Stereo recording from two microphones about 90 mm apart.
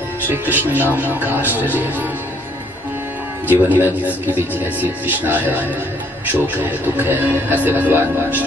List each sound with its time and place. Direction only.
0.3 s speech: 20° right (ahead or behind)
3.4 s speech: 20° right (ahead or behind)